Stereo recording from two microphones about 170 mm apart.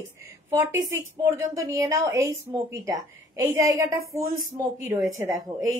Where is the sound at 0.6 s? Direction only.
15° right (ahead or behind).